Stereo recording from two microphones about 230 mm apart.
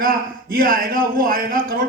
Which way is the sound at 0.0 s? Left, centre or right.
Right.